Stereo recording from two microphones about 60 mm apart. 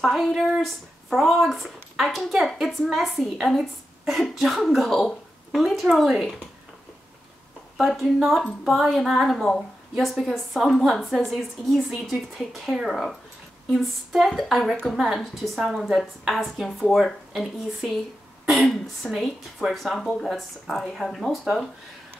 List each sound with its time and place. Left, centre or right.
0.0 s a woman's voice: centre
7.7 s a woman's voice: centre
14.3 s a woman's voice: centre